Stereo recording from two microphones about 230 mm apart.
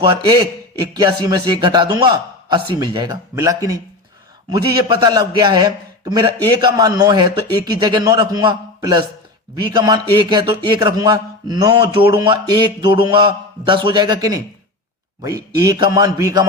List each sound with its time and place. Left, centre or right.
0.9 s a man's voice: centre